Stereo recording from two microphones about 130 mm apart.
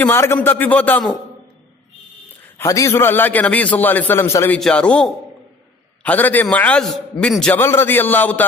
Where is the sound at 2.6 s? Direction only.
20° left (ahead or behind).